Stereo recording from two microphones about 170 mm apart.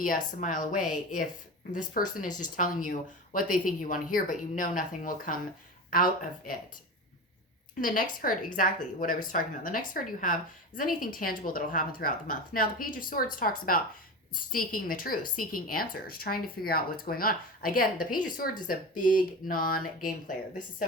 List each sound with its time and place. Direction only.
0.0 s a woman's voice: 55° left (ahead or behind)
7.8 s a woman's voice: 55° left (ahead or behind)